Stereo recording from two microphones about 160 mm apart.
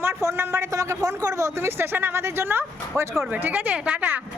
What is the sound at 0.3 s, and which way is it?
A man's voice, 20° right (ahead or behind).